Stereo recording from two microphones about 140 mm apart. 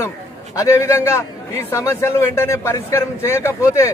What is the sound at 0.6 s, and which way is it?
A man's voice, 20° left (ahead or behind).